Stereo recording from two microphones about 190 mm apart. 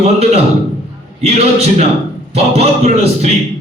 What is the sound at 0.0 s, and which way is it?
Speech, 35° right (ahead or behind).